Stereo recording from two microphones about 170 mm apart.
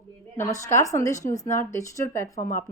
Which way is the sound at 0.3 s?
15° left (ahead or behind).